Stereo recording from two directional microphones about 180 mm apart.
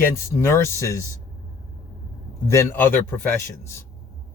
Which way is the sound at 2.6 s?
10° left (ahead or behind).